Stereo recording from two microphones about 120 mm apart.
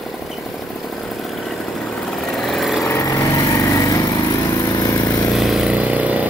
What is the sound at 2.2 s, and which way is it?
Vehicle, centre (ahead or behind).